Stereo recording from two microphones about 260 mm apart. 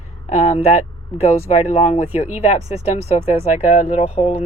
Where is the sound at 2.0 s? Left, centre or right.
Centre.